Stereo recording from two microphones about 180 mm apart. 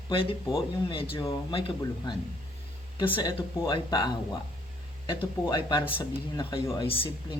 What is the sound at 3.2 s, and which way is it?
Speech, 25° left (ahead or behind).